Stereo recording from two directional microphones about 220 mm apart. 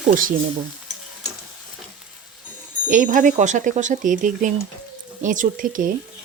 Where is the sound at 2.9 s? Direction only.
35° right (ahead or behind).